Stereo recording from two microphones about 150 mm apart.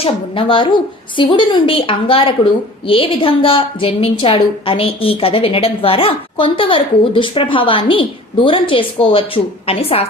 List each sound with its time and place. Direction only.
0.0 s a woman's voice: 35° left (ahead or behind)